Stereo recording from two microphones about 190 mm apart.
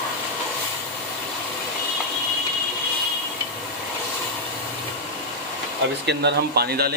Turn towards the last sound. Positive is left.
turn(degrees=-55)  # may be behind; listen again after turning